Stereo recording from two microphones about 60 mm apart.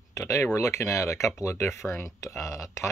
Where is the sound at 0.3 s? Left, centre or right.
Left.